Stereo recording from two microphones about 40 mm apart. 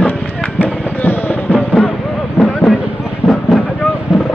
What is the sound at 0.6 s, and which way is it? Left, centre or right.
Music, left.